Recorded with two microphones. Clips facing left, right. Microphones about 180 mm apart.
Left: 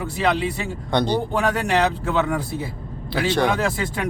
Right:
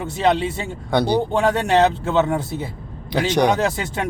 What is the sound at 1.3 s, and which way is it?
Speech, 25° right (ahead or behind).